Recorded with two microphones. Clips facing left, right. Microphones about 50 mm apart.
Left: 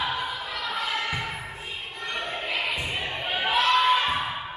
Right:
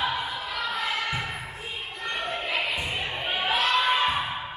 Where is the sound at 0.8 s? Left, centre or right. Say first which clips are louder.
Left 2 dB; centre.